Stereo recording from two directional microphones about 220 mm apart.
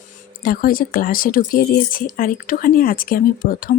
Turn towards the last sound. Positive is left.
turn(degrees=40)  # may be behind; listen again after turning